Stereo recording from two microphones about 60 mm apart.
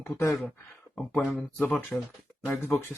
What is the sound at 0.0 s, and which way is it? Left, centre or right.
Speech, left.